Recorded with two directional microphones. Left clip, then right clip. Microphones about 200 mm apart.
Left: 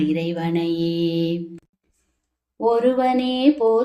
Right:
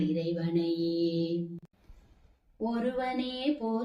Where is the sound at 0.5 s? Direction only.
35° left (ahead or behind).